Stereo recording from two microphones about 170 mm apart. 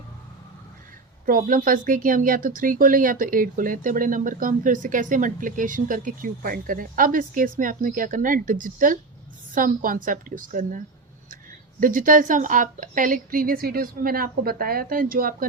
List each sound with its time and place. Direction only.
1.2 s speech: 55° right (ahead or behind)
11.8 s a woman's voice: 55° right (ahead or behind)